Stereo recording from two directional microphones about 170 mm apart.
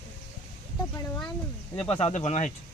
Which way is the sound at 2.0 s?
40° left (ahead or behind).